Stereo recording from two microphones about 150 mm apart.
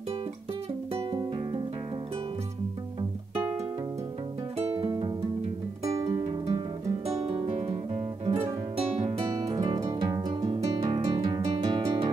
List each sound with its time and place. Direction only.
4.7 s music: 35° right (ahead or behind)
6.0 s music: 45° right (ahead or behind)
9.0 s music: 25° right (ahead or behind)